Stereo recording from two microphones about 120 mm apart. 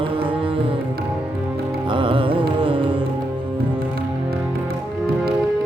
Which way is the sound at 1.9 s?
45° right (ahead or behind).